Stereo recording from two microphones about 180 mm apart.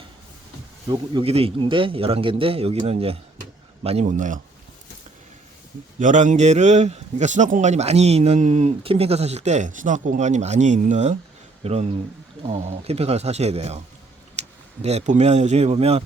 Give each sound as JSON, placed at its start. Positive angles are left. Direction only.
{"t": 0.9, "sound": "a man's voice", "side_deg": -25}
{"t": 6.0, "sound": "a man's voice", "side_deg": -45}